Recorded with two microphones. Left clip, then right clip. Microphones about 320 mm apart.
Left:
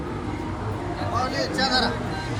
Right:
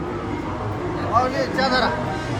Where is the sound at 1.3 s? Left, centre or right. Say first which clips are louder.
Right 3 dB; right.